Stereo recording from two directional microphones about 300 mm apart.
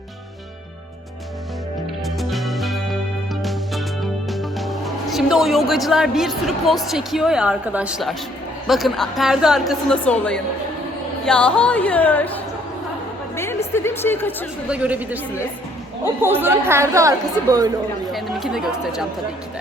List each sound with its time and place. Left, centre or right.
2.0 s music: centre
3.4 s a woman's voice: centre
13.3 s music: centre
13.7 s a woman's voice: centre
14.7 s a woman's voice: centre
18.1 s speech: centre